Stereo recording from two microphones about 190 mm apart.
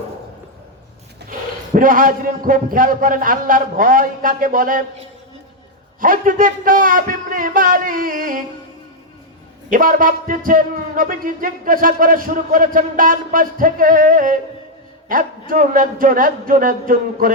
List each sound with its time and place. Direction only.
1.7 s speech: 45° right (ahead or behind)
9.6 s speech: 45° right (ahead or behind)